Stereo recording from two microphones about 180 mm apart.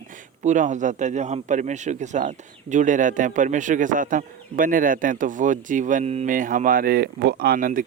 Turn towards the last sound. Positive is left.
turn(degrees=-50)  # may be behind; listen again after turning